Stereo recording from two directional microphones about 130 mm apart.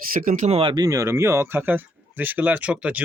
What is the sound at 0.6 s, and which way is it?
Speech, 40° right (ahead or behind).